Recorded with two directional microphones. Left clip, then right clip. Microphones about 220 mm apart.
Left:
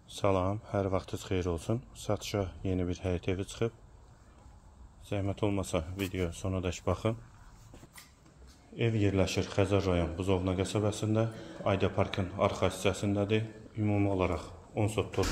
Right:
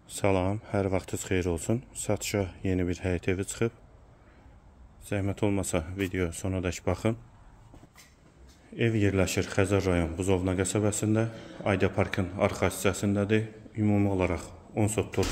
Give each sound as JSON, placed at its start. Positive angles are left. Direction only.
{"t": 0.1, "sound": "speech", "side_deg": -35}
{"t": 5.0, "sound": "speech", "side_deg": -35}
{"t": 8.7, "sound": "speech", "side_deg": -30}